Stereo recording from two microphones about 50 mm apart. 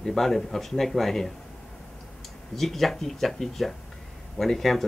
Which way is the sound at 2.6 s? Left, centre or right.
Centre.